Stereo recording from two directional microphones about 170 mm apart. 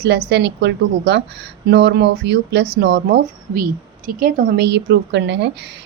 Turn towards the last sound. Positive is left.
turn(degrees=-90)